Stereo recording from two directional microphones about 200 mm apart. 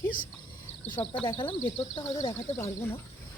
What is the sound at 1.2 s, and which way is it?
Speech, 25° left (ahead or behind).